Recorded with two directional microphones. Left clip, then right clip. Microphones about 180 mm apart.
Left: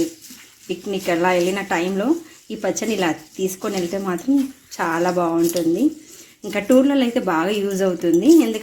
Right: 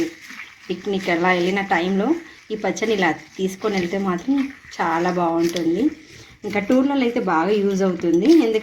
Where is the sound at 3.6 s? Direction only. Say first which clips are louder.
Right 1 dB; 25° left (ahead or behind).